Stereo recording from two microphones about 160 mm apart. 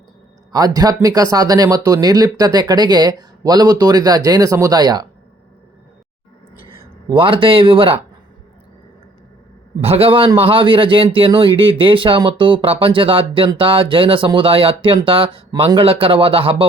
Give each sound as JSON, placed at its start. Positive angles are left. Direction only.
{"t": 0.5, "sound": "speech", "side_deg": -25}
{"t": 7.1, "sound": "a man's voice", "side_deg": -30}
{"t": 9.8, "sound": "a man's voice", "side_deg": -35}